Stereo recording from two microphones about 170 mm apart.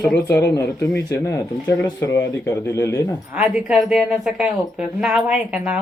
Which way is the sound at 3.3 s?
5° right (ahead or behind).